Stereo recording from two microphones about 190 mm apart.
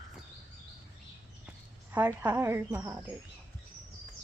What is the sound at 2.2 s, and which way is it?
Speech, 10° right (ahead or behind).